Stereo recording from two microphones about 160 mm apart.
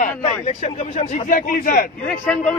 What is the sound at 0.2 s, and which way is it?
Speech, 40° left (ahead or behind).